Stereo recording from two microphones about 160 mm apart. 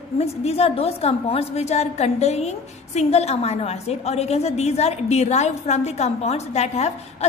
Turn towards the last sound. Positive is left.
turn(degrees=45)  # may be behind; listen again after turning